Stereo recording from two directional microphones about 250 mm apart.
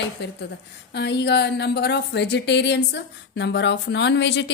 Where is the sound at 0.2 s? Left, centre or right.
Left.